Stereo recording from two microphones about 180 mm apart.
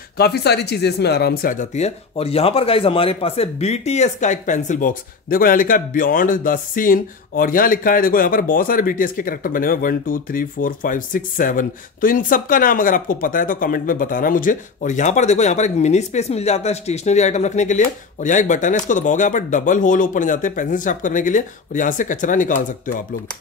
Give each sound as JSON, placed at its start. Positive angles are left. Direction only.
{"t": 0.2, "sound": "speech", "side_deg": 65}